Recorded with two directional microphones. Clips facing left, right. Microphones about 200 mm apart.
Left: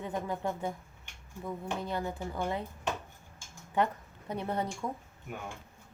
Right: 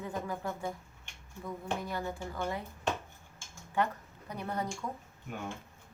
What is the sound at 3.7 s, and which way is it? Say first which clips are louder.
Speech: left 2 dB; 20° left (ahead or behind).